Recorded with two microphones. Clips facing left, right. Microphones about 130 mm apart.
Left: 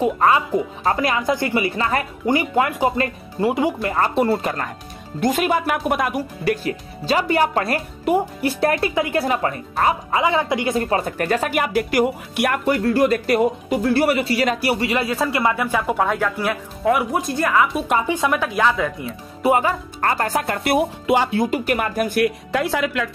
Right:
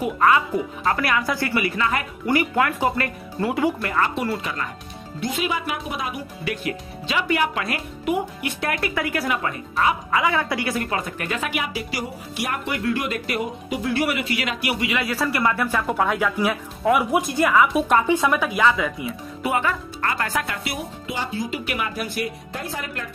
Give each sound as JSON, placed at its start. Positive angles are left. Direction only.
{"t": 0.0, "sound": "speech", "side_deg": 25}
{"t": 2.2, "sound": "speech", "side_deg": 25}
{"t": 3.9, "sound": "speech", "side_deg": 35}
{"t": 5.2, "sound": "speech", "side_deg": 50}
{"t": 10.2, "sound": "speech", "side_deg": 25}
{"t": 12.6, "sound": "speech", "side_deg": 40}
{"t": 15.1, "sound": "speech", "side_deg": 20}
{"t": 15.9, "sound": "speech", "side_deg": 0}
{"t": 19.4, "sound": "speech", "side_deg": 35}
{"t": 21.5, "sound": "speech", "side_deg": 45}
{"t": 22.2, "sound": "speech", "side_deg": 90}